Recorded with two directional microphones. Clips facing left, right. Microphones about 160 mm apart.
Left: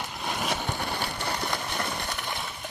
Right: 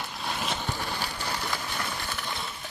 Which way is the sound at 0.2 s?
10° left (ahead or behind).